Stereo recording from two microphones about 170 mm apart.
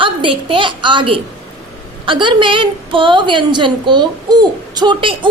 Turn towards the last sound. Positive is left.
turn(degrees=-30)  # may be behind; listen again after turning